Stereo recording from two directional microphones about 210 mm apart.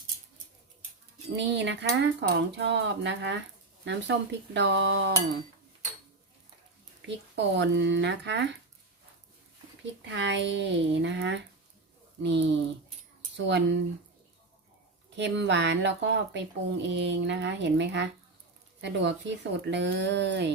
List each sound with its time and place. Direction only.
1.4 s speech: 55° right (ahead or behind)
7.3 s speech: 55° right (ahead or behind)
10.0 s speech: 55° right (ahead or behind)
15.2 s speech: 55° right (ahead or behind)